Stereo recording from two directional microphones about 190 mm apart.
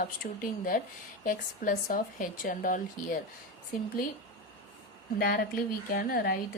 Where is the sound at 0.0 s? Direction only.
45° left (ahead or behind).